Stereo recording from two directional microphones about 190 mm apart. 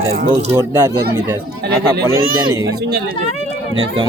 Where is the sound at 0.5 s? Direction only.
15° right (ahead or behind).